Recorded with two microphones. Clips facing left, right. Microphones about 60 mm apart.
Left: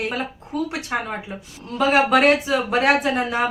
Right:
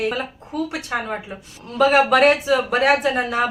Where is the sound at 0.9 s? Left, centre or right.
Centre.